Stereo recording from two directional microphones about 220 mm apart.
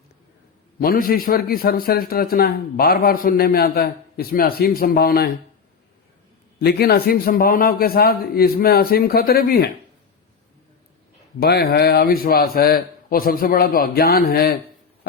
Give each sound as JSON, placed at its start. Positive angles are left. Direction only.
{"t": 0.8, "sound": "a man's voice", "side_deg": 40}
{"t": 6.6, "sound": "a man's voice", "side_deg": 45}
{"t": 11.3, "sound": "a man's voice", "side_deg": 45}